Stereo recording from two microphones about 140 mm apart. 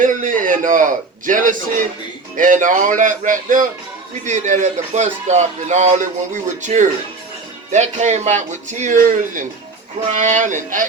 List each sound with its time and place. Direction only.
0.0 s a man's voice: 70° right (ahead or behind)